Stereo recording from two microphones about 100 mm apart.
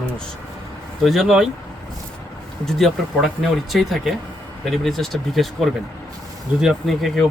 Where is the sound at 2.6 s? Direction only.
Centre (ahead or behind).